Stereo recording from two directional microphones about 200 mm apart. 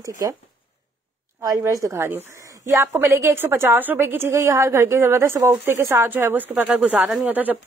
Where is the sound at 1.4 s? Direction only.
15° right (ahead or behind).